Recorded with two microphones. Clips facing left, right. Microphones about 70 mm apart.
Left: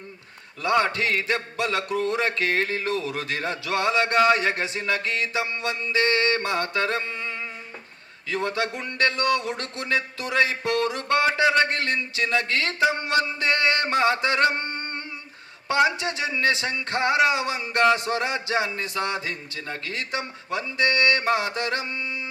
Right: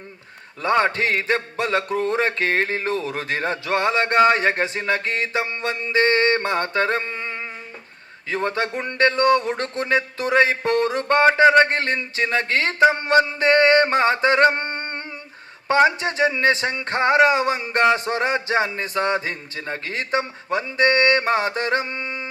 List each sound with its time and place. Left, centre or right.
0.6 s a man's voice: right